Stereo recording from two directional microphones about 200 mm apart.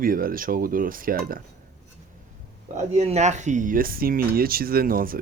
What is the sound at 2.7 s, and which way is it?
Speech, 35° right (ahead or behind).